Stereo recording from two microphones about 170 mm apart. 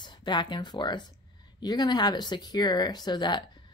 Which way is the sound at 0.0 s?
25° left (ahead or behind).